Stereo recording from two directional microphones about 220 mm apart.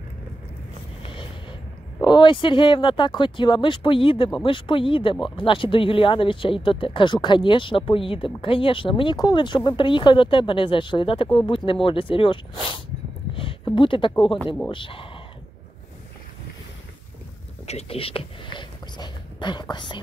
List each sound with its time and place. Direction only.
1.0 s music: 25° left (ahead or behind)
2.0 s speech: 20° left (ahead or behind)
13.3 s a sound: 25° left (ahead or behind)
14.7 s speech: 25° left (ahead or behind)
17.6 s speech: 25° left (ahead or behind)